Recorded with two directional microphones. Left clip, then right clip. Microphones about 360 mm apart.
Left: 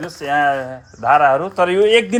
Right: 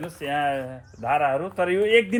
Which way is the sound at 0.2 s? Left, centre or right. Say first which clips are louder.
Left 9 dB; left.